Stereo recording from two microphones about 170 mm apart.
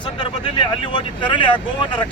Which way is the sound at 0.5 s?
30° left (ahead or behind).